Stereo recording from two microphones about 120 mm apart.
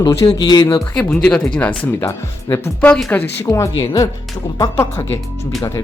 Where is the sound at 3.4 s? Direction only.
25° left (ahead or behind).